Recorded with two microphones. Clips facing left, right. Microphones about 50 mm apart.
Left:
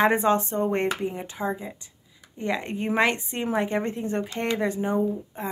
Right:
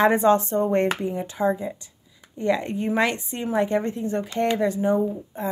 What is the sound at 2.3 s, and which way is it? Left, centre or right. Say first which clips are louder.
A woman's voice: right 5 dB; centre.